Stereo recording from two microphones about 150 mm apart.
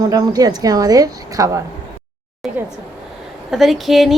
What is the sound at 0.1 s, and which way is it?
A woman's voice, 25° right (ahead or behind).